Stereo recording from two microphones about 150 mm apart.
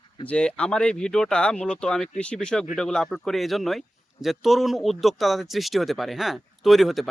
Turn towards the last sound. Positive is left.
turn(degrees=0)  # may be behind; listen again after turning